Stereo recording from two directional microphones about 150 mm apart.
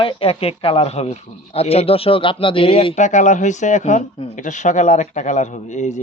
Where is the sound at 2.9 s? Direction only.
55° left (ahead or behind).